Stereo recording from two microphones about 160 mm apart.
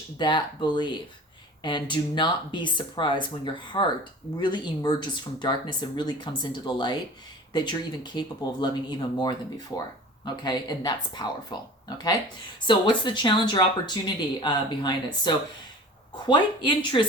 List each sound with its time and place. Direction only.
0.2 s speech: 30° left (ahead or behind)